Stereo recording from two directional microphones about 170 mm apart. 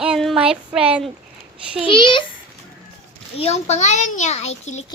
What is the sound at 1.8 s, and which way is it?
Speech, 30° left (ahead or behind).